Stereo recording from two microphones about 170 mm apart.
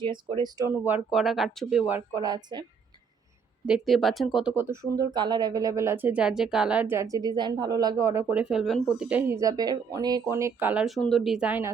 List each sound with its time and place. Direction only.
0.0 s speech: 30° right (ahead or behind)
0.9 s speech: 5° right (ahead or behind)
1.9 s speech: 20° right (ahead or behind)
3.7 s speech: centre (ahead or behind)